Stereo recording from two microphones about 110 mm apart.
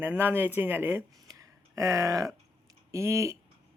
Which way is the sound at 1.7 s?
30° right (ahead or behind).